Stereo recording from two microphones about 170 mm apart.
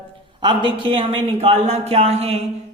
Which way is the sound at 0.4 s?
30° right (ahead or behind).